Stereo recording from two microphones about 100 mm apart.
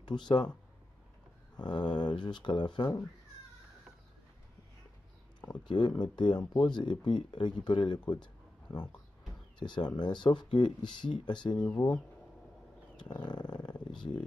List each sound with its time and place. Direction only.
0.0 s speech: 50° left (ahead or behind)
1.6 s speech: 50° left (ahead or behind)
5.5 s speech: 50° left (ahead or behind)
9.6 s speech: 50° left (ahead or behind)
12.9 s speech: 50° left (ahead or behind)